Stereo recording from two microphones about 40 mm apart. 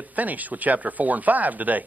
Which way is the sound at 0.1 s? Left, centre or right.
Right.